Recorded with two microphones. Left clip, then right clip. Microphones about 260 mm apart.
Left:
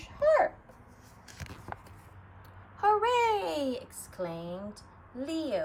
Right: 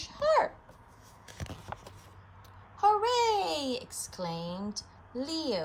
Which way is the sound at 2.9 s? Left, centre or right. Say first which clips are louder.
Even; centre.